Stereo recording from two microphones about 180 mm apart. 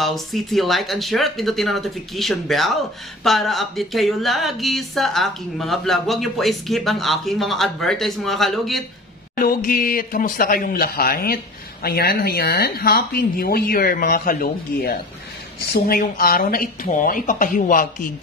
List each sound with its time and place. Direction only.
0.0 s speech: centre (ahead or behind)
9.3 s speech: 50° left (ahead or behind)